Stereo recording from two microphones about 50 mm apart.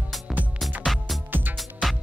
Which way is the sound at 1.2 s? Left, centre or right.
Right.